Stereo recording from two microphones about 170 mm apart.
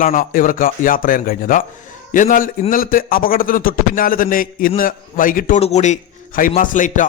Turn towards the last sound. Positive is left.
turn(degrees=50)  # may be behind; listen again after turning